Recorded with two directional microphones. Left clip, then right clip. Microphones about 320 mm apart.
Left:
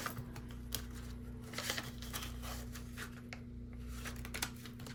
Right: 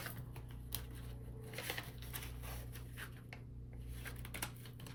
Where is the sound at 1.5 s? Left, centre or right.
Centre.